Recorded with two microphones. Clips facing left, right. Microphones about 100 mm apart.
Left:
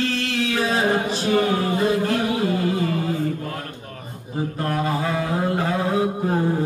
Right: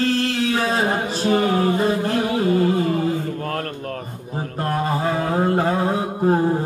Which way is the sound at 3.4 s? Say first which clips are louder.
Right 6 dB; 55° right (ahead or behind).